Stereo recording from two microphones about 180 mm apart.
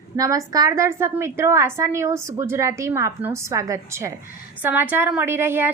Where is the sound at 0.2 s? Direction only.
20° right (ahead or behind).